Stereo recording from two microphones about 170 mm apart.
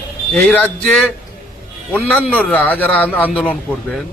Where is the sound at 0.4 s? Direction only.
10° left (ahead or behind).